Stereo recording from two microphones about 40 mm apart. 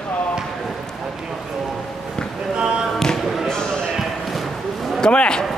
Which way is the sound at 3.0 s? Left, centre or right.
Centre.